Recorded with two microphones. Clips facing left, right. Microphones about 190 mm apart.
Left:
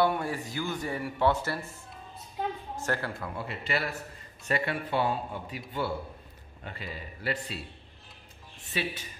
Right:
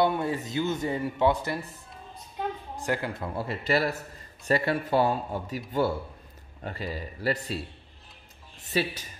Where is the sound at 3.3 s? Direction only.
40° right (ahead or behind).